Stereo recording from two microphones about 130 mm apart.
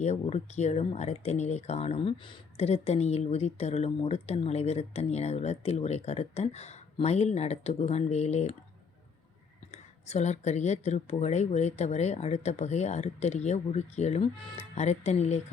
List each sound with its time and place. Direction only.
0.0 s speech: 60° left (ahead or behind); by 2.4 s 40° left (ahead or behind)
2.6 s speech: 55° left (ahead or behind)
9.7 s speech: 60° left (ahead or behind)